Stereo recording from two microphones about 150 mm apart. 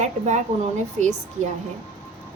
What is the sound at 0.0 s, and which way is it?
Speech, 50° right (ahead or behind).